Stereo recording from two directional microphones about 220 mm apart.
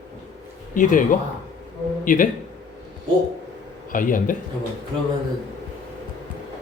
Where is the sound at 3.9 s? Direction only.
40° left (ahead or behind).